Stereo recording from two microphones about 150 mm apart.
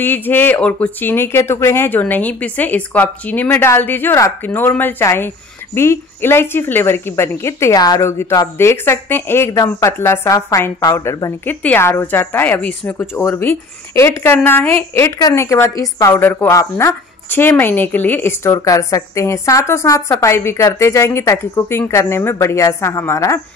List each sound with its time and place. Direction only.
0.0 s speech: 15° left (ahead or behind)
11.4 s speech: 10° left (ahead or behind)